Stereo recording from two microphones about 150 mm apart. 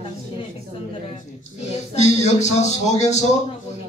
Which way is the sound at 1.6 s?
50° left (ahead or behind).